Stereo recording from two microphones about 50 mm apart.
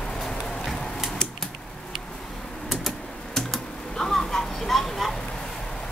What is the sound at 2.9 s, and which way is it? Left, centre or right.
Typing, centre.